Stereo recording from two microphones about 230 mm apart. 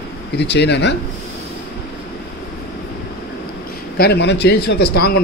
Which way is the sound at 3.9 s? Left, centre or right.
Left.